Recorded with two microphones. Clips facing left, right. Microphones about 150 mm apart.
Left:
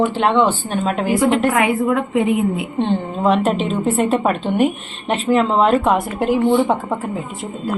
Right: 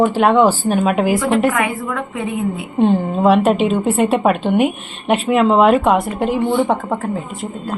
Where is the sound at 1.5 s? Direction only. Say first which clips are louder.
Left 4 dB; 20° left (ahead or behind).